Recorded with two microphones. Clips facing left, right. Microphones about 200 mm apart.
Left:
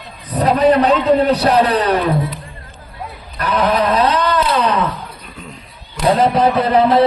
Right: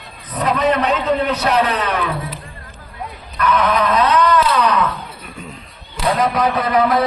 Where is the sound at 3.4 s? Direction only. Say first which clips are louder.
Left 1 dB; 30° left (ahead or behind).